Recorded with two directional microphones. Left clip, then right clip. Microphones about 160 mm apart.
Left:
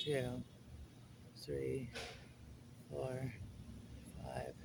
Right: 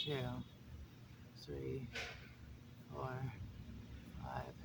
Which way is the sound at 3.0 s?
15° right (ahead or behind).